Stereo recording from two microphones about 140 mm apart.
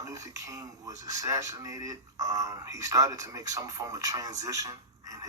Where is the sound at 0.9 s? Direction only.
25° right (ahead or behind).